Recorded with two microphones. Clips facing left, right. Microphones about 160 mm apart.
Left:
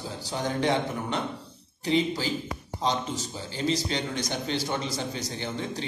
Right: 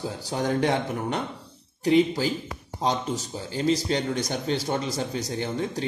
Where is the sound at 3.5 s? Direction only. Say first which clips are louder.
Right 4 dB; 45° right (ahead or behind).